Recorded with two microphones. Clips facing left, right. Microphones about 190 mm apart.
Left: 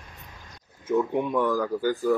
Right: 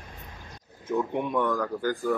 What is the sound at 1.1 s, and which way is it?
Speech, 5° left (ahead or behind).